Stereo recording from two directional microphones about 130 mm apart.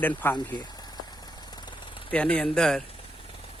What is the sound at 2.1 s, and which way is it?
Speech, 10° left (ahead or behind).